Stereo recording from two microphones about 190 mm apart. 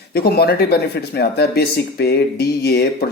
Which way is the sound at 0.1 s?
55° left (ahead or behind).